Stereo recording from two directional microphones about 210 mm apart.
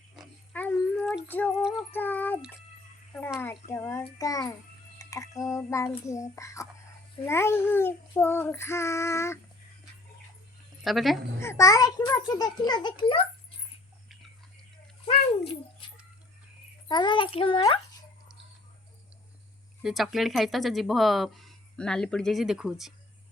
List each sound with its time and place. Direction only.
0.2 s dog: 5° left (ahead or behind)
1.3 s child singing: 10° left (ahead or behind)
3.4 s child singing: 10° left (ahead or behind)
10.8 s speech: centre (ahead or behind)
11.3 s a child's voice: 15° left (ahead or behind)
16.9 s a child's voice: 20° left (ahead or behind)
19.8 s speech: centre (ahead or behind)